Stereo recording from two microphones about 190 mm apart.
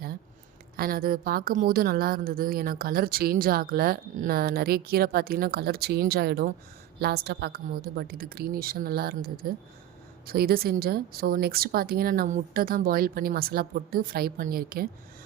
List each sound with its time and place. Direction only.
0.8 s a woman's voice: 50° right (ahead or behind)